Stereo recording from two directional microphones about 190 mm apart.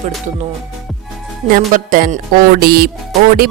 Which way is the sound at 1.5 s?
45° right (ahead or behind).